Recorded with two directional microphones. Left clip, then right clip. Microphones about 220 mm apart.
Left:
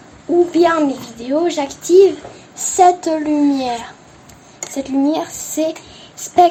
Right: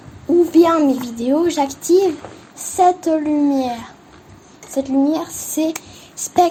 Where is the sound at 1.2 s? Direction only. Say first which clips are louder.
Even; 35° right (ahead or behind).